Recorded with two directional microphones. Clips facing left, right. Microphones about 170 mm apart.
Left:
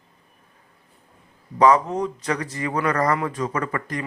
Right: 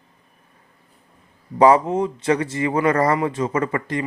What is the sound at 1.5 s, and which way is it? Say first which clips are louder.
Speech: right 3 dB; 30° right (ahead or behind).